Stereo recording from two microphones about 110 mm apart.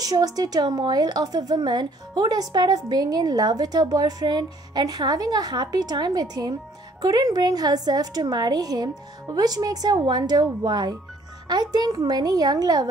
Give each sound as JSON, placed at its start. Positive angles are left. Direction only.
{"t": 0.0, "sound": "a woman's voice", "side_deg": -35}